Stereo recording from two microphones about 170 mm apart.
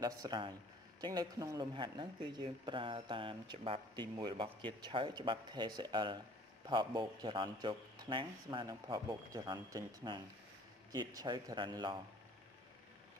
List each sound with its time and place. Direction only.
0.0 s speech: 25° right (ahead or behind)